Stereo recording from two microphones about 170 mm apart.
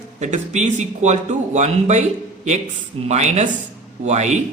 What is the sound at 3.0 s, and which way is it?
A man's voice, 40° right (ahead or behind).